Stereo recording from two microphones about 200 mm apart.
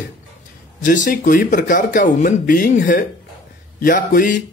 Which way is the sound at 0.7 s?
40° left (ahead or behind).